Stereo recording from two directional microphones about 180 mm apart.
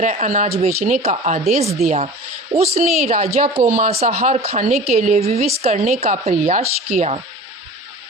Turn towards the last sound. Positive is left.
turn(degrees=-40)  # may be behind; listen again after turning